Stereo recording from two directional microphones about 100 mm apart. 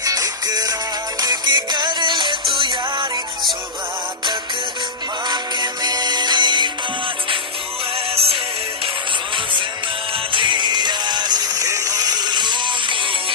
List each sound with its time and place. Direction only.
0.0 s music: 35° right (ahead or behind); by 3.1 s 55° right (ahead or behind)
5.3 s music: 45° right (ahead or behind)
8.1 s music: 80° right
10.3 s music: 50° right (ahead or behind)